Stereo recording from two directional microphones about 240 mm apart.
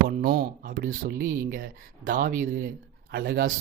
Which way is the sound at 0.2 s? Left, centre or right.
Right.